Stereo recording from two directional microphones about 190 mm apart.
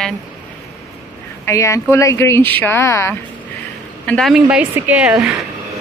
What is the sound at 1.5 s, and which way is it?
Speech, 15° left (ahead or behind).